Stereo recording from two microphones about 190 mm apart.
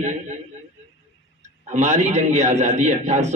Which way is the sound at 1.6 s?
40° right (ahead or behind).